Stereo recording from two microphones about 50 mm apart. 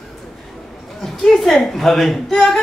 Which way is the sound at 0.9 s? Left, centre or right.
Centre.